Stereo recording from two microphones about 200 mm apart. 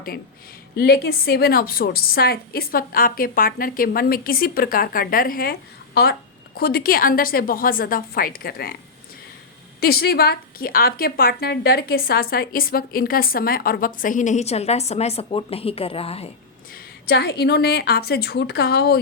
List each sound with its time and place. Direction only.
0.8 s a woman's voice: 50° left (ahead or behind)
9.8 s a woman's voice: 50° left (ahead or behind); by 16.3 s 30° left (ahead or behind)
17.1 s a woman's voice: 55° left (ahead or behind)